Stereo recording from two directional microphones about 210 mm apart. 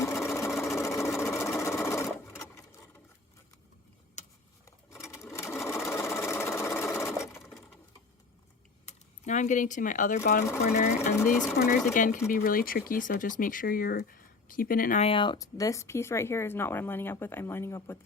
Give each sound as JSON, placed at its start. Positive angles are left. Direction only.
{"t": 0.0, "sound": "sewing machine", "side_deg": 10}
{"t": 4.2, "sound": "a sound", "side_deg": 35}
{"t": 4.9, "sound": "sewing machine", "side_deg": 15}
{"t": 8.9, "sound": "speech", "side_deg": 35}